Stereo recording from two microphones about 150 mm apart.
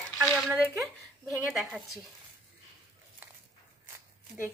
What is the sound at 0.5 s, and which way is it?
Speech, 20° right (ahead or behind).